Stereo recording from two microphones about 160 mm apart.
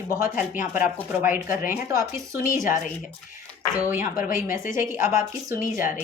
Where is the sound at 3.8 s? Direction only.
15° right (ahead or behind).